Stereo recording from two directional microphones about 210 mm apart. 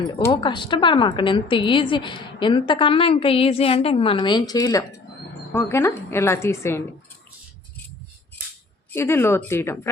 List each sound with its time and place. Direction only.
0.1 s a woman's voice: 20° left (ahead or behind)
8.9 s a woman's voice: 10° left (ahead or behind)